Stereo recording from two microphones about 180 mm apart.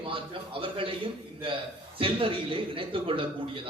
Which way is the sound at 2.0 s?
30° right (ahead or behind).